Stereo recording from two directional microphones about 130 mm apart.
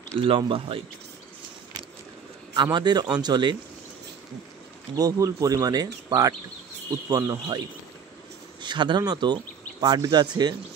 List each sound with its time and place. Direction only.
0.2 s speech: 40° right (ahead or behind)
2.5 s a man's voice: 35° right (ahead or behind)
4.9 s speech: 25° right (ahead or behind)